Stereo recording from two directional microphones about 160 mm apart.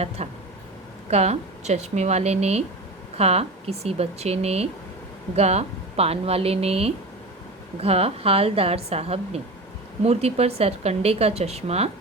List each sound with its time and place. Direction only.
0.2 s speech: 40° right (ahead or behind)